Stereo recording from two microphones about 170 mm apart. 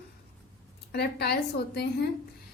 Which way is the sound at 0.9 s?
70° left (ahead or behind).